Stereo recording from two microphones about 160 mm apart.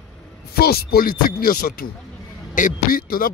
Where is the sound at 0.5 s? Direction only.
75° left (ahead or behind).